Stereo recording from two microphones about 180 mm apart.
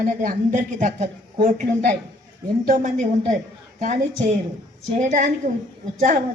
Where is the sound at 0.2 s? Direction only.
45° right (ahead or behind).